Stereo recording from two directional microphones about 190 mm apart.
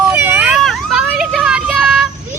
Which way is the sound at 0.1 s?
10° right (ahead or behind).